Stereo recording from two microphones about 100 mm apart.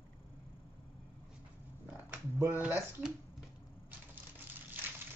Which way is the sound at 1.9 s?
20° right (ahead or behind).